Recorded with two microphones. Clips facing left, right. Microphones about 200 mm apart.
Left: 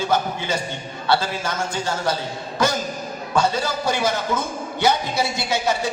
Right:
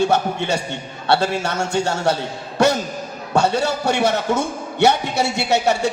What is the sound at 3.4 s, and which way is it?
A man's voice, 70° right (ahead or behind).